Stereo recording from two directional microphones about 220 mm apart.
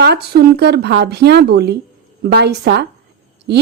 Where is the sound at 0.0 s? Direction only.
45° right (ahead or behind).